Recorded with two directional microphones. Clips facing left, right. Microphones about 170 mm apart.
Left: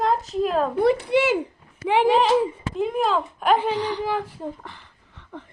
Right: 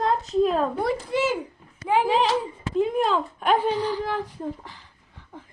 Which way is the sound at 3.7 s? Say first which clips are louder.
Even; 80° left.